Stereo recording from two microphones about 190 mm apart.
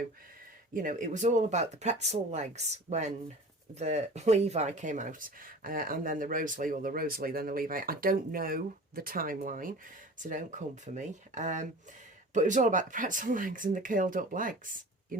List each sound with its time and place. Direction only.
0.7 s speech: 45° right (ahead or behind)
3.8 s speech: 35° right (ahead or behind)